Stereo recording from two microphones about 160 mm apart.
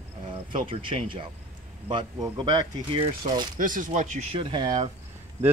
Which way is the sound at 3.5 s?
55° right (ahead or behind).